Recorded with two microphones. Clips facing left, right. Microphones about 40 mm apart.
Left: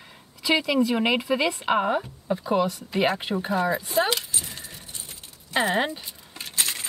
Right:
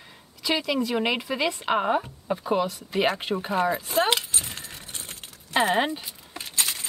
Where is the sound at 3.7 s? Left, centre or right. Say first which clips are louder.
Even; right.